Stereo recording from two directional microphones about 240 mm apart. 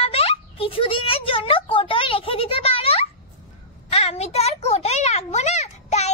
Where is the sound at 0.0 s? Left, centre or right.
Left.